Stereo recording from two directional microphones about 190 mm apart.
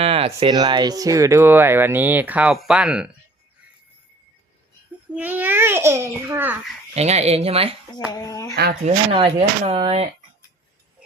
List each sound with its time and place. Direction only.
0.0 s speech: 30° right (ahead or behind); by 3.1 s 5° right (ahead or behind)
5.0 s speech: 10° right (ahead or behind)
6.9 s speech: 35° right (ahead or behind)
8.1 s speech: 20° left (ahead or behind)
8.5 s speech: 60° right (ahead or behind)
8.9 s speech: 30° right (ahead or behind)